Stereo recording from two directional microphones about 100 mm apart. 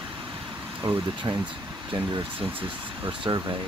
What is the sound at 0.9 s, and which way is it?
Speech, 60° right (ahead or behind).